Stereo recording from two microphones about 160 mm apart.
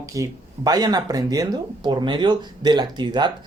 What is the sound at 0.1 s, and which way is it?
Speech, 20° right (ahead or behind).